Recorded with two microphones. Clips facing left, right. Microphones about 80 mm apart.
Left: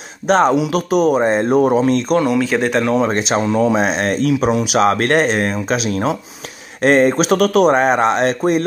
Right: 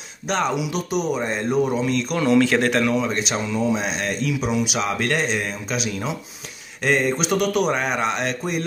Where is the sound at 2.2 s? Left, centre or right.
Centre.